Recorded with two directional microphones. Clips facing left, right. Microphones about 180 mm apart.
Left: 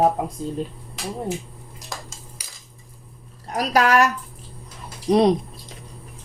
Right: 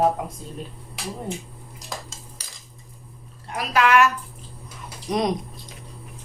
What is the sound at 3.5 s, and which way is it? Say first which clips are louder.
Speech: left 1 dB; 40° left (ahead or behind).